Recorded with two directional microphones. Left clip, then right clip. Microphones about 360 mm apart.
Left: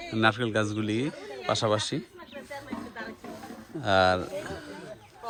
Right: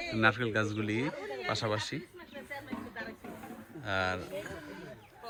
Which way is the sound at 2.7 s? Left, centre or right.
Left.